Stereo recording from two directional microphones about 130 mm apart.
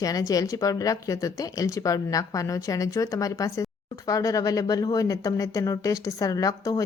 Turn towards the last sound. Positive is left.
turn(degrees=25)  # may be behind; listen again after turning